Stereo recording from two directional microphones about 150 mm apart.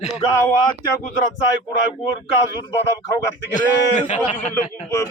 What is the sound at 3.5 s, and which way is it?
Speech, 55° left (ahead or behind).